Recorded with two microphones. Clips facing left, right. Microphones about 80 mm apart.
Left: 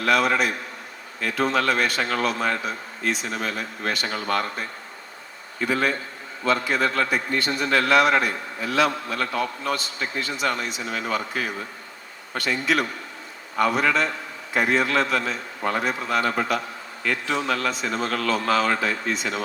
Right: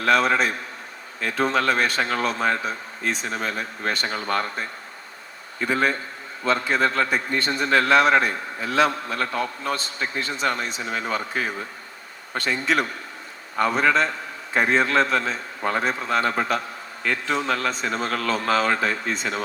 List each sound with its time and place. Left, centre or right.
0.0 s a man's voice: right
5.6 s a man's voice: right